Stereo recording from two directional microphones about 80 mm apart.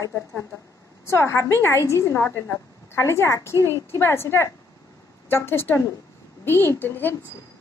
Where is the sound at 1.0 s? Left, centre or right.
Left.